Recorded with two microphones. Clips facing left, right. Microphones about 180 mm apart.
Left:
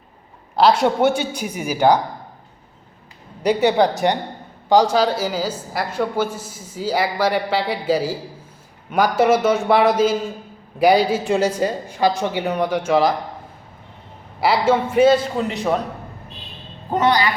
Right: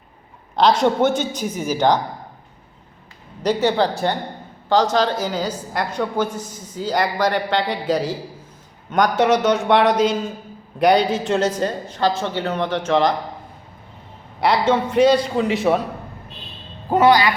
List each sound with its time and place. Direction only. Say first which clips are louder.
0.5 s a woman's voice: left 1 dB; 5° left (ahead or behind)
3.4 s a woman's voice: left 2 dB; 15° left (ahead or behind)
14.4 s a man's voice: even; 5° left (ahead or behind)
16.9 s speech: right 3 dB; 10° right (ahead or behind)